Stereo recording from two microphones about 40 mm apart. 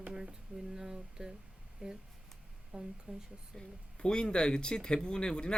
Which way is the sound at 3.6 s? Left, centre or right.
Left.